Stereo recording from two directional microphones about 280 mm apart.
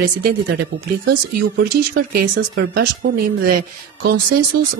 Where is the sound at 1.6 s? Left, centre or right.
Right.